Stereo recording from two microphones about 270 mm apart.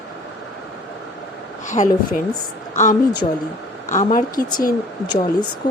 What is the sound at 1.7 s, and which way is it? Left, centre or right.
Speech, left.